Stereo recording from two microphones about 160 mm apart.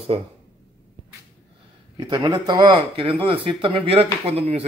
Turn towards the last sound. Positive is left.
turn(degrees=-40)  # may be behind; listen again after turning